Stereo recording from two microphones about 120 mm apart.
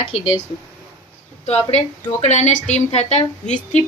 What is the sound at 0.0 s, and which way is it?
Speech, 55° left (ahead or behind).